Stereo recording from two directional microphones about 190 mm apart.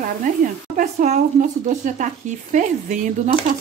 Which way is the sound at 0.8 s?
40° right (ahead or behind).